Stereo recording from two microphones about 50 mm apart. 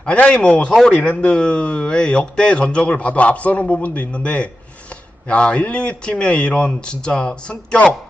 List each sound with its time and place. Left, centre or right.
0.0 s speech: centre
0.7 s a man's voice: centre
0.9 s speech: left